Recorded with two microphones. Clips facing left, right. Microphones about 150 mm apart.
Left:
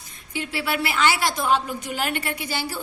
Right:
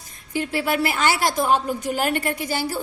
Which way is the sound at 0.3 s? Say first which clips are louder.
Right 4 dB; 45° right (ahead or behind).